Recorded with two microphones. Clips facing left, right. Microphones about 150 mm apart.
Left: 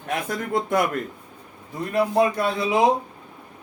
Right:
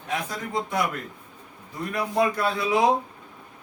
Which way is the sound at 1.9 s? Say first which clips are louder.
Left 4 dB; 25° left (ahead or behind).